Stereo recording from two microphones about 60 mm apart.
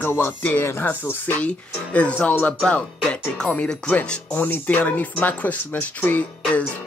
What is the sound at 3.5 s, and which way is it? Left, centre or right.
Speech, left.